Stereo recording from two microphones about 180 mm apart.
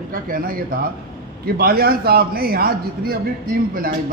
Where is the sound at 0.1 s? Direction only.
50° right (ahead or behind).